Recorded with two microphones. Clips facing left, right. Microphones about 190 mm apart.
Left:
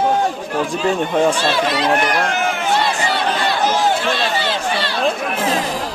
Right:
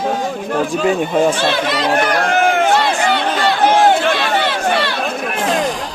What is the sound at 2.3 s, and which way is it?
Run, 55° right (ahead or behind).